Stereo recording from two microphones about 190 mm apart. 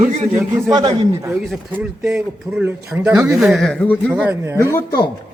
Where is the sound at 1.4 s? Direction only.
5° right (ahead or behind).